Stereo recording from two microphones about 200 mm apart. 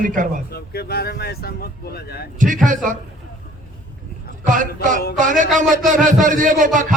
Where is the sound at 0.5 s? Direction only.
50° left (ahead or behind).